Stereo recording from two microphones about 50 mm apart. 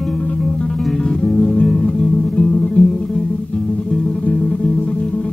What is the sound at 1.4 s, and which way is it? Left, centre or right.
Music, centre.